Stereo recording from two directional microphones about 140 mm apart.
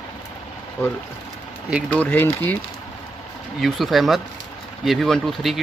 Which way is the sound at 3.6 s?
Centre (ahead or behind).